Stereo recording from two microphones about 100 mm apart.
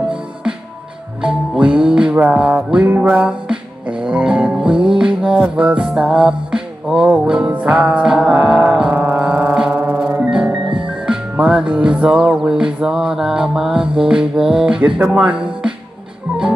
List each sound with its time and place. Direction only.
0.1 s music: 10° right (ahead or behind)
15.0 s speech: 10° right (ahead or behind)